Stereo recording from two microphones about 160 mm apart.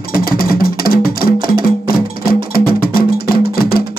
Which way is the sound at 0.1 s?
65° left (ahead or behind).